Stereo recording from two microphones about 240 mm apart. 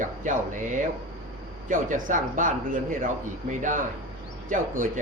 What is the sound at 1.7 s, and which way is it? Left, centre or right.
Speech, right.